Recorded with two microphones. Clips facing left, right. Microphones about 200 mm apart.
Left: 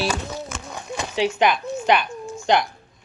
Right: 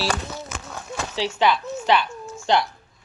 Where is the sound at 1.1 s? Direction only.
15° left (ahead or behind).